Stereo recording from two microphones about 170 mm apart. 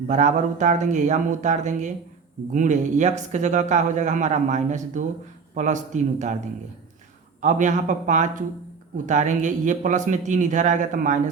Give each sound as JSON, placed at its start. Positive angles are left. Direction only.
{"t": 0.1, "sound": "speech", "side_deg": -45}
{"t": 7.4, "sound": "speech", "side_deg": -45}